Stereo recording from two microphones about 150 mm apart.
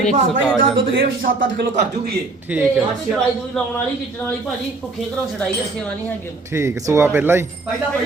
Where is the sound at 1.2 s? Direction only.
70° right (ahead or behind).